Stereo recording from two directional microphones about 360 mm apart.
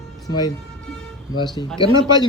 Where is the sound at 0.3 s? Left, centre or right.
Centre.